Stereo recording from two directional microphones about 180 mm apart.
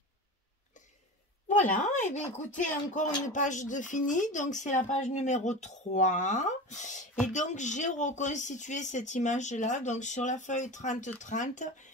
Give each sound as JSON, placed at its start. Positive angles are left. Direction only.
{"t": 1.5, "sound": "speech", "side_deg": 40}